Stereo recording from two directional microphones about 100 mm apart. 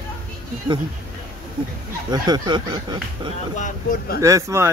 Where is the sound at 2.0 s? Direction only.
45° right (ahead or behind).